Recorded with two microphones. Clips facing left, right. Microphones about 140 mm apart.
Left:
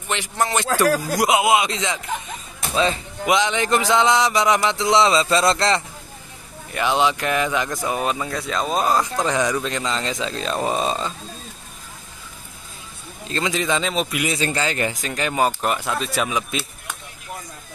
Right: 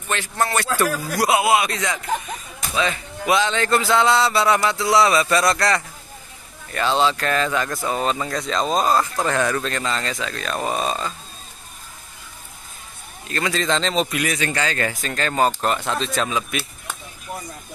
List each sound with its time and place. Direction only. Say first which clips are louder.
0.1 s speech: even; 15° left (ahead or behind)
1.1 s a sound: right 3 dB; 20° left (ahead or behind)
3.3 s a sound: even; 15° left (ahead or behind)
6.7 s speech: even; 15° left (ahead or behind)
13.3 s speech: even; 20° left (ahead or behind)
14.2 s speech: left 1 dB; 25° left (ahead or behind)